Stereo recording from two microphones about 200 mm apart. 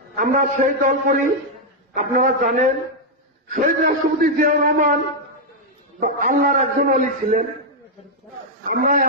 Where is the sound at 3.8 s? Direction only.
45° right (ahead or behind).